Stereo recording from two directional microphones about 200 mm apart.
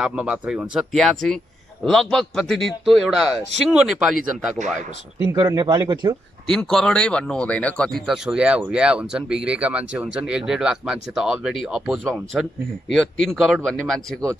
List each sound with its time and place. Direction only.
0.0 s speech: 5° right (ahead or behind)
5.3 s a man's voice: 20° right (ahead or behind)
6.4 s speech: centre (ahead or behind)